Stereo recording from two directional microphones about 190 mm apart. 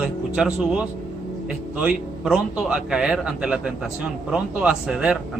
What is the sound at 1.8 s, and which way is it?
A man's voice, 5° right (ahead or behind).